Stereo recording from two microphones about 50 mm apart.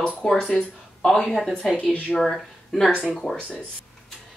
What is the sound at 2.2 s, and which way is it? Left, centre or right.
Speech, centre.